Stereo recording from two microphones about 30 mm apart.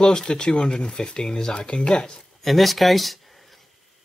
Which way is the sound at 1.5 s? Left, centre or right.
Left.